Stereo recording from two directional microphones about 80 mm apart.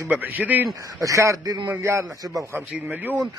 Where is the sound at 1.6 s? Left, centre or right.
Right.